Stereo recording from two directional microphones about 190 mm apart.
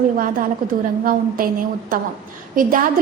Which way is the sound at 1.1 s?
45° right (ahead or behind).